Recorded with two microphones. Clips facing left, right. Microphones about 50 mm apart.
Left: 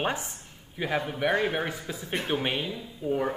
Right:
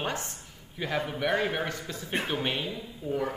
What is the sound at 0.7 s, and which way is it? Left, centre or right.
A man's voice, centre.